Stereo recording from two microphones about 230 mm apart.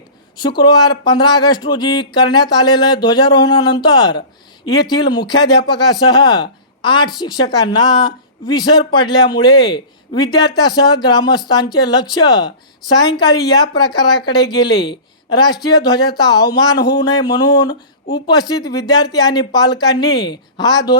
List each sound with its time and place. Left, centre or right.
0.9 s speech: centre